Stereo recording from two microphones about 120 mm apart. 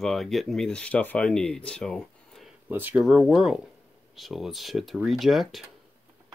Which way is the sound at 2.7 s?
15° right (ahead or behind).